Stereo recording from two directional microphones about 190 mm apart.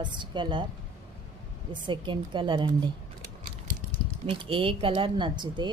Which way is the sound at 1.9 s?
25° right (ahead or behind).